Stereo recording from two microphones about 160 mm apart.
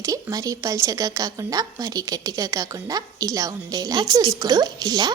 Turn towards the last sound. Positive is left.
turn(degrees=-25)  # may be behind; listen again after turning